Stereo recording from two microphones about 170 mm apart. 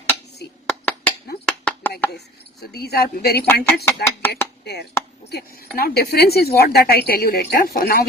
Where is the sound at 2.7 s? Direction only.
70° left (ahead or behind).